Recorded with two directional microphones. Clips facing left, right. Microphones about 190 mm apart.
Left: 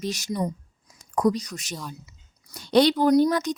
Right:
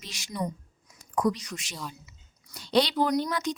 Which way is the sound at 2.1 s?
45° left (ahead or behind).